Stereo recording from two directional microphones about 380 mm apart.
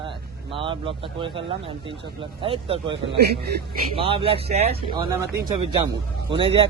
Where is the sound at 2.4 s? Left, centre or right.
Centre.